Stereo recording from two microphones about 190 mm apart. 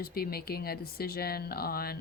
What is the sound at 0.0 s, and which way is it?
Speech, 55° left (ahead or behind).